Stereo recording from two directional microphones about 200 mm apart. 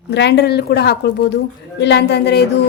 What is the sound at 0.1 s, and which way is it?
A woman's voice, 60° left (ahead or behind).